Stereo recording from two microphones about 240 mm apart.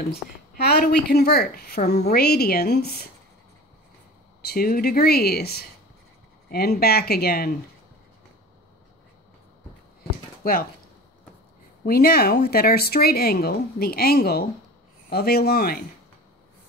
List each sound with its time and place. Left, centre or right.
0.1 s speech: left
4.4 s speech: left
10.4 s speech: left
11.8 s speech: left